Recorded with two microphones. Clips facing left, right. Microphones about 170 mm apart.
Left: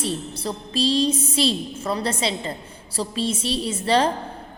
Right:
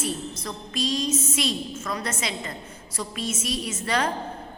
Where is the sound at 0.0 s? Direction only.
30° left (ahead or behind).